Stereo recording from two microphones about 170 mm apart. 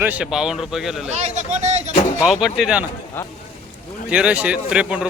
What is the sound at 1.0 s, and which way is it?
Speech, 40° right (ahead or behind).